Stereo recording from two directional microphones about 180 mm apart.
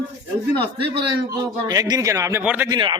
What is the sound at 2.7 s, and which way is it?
Speech, 25° right (ahead or behind).